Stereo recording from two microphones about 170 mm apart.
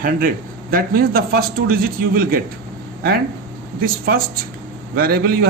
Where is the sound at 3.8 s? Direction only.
60° right (ahead or behind).